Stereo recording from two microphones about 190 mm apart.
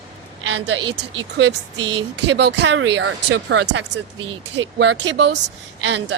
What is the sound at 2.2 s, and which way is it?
Speech, 65° right (ahead or behind).